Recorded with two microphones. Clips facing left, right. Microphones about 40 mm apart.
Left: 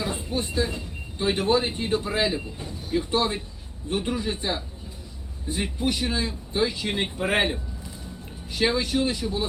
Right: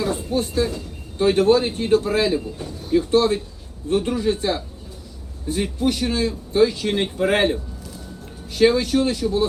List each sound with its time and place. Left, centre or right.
0.0 s speech: left